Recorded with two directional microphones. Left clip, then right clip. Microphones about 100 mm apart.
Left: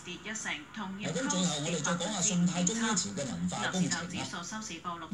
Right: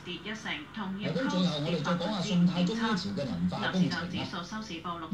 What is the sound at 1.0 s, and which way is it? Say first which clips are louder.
Speech: right 1 dB; 40° left (ahead or behind).